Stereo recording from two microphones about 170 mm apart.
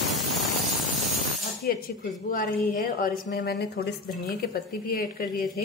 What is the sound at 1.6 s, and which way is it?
Cap gun, 60° left (ahead or behind).